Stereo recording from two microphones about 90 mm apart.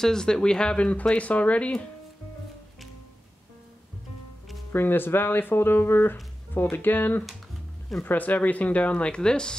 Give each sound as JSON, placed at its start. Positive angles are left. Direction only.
{"t": 0.0, "sound": "speech", "side_deg": 5}
{"t": 4.7, "sound": "speech", "side_deg": 25}